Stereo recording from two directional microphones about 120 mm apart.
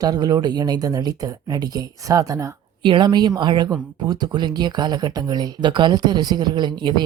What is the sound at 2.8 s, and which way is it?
Speech, 40° right (ahead or behind).